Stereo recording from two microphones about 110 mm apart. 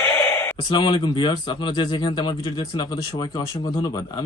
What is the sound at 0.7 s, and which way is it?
Speech, 45° left (ahead or behind).